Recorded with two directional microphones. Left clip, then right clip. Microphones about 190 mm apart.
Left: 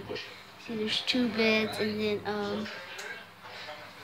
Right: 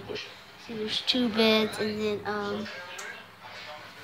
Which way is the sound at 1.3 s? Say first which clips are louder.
Right 4 dB; 20° right (ahead or behind).